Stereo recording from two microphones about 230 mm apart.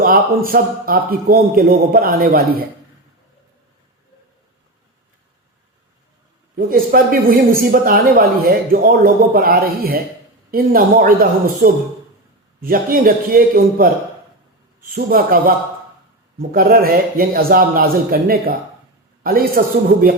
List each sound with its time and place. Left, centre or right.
0.0 s speech: right
6.6 s speech: right